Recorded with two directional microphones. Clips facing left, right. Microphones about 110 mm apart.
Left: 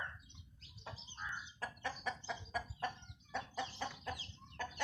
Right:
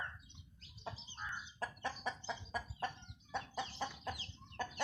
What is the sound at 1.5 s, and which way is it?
Chicken, 25° right (ahead or behind).